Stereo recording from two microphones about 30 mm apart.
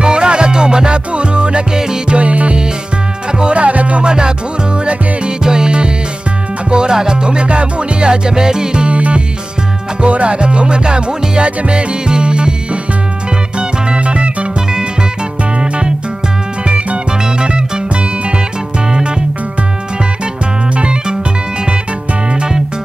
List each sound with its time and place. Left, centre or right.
0.0 s music: right
3.3 s music: right
3.6 s music: right
4.0 s music: right
5.4 s music: right
8.8 s music: right
13.6 s music: right
16.6 s music: right